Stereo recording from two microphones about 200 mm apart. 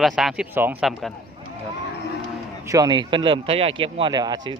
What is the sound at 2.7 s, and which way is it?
Speech, 20° right (ahead or behind).